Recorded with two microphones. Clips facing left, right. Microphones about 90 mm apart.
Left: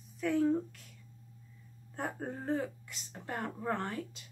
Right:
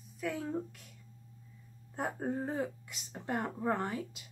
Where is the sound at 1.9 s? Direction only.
5° right (ahead or behind).